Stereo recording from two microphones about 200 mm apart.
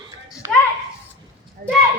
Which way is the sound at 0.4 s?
15° right (ahead or behind).